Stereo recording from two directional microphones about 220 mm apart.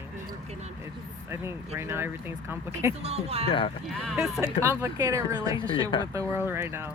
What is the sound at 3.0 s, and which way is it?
Speech, 30° right (ahead or behind).